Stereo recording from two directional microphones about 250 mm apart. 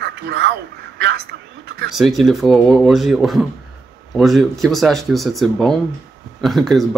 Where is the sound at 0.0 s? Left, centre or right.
Right.